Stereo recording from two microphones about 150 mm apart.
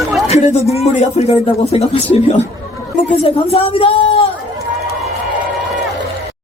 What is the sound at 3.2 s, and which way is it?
Speech, 40° left (ahead or behind).